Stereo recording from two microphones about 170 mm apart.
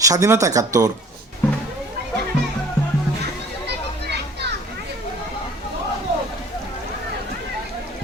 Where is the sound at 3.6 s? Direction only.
80° right.